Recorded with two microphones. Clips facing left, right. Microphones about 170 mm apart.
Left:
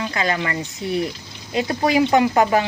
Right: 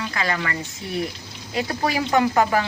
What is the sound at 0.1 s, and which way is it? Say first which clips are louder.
Speech: left 3 dB; 25° left (ahead or behind).